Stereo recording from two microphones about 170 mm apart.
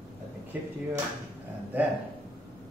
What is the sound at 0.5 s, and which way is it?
Speech, 10° right (ahead or behind).